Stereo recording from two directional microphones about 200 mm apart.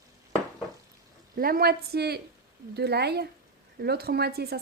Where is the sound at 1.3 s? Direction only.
50° right (ahead or behind).